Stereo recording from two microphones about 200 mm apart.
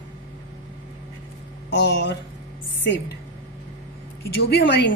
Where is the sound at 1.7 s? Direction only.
60° left (ahead or behind).